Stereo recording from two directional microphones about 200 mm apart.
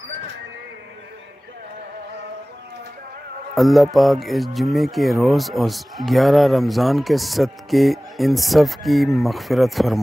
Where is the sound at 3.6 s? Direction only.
Centre (ahead or behind).